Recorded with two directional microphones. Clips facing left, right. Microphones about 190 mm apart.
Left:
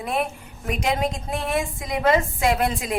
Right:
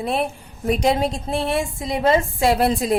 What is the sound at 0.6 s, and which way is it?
A woman's voice, 35° right (ahead or behind).